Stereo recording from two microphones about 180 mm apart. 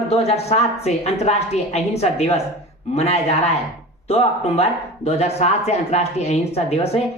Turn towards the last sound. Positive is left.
turn(degrees=35)  # may be behind; listen again after turning